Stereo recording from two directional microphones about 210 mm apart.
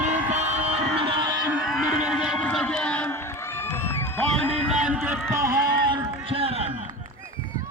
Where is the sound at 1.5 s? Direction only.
5° right (ahead or behind).